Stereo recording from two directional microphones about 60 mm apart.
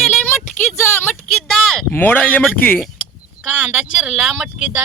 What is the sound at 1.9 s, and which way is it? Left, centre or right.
Speech, left.